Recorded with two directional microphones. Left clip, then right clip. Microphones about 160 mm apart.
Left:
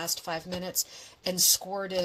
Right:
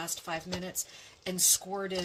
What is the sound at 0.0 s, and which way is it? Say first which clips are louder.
Speech: left 3 dB; 40° left (ahead or behind).